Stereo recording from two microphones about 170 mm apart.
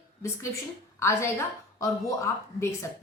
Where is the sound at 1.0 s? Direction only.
15° left (ahead or behind).